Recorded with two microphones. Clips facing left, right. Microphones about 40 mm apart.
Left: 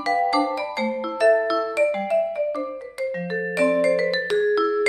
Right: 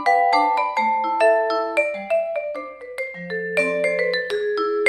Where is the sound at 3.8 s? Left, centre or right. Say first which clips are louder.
Left 1 dB; right.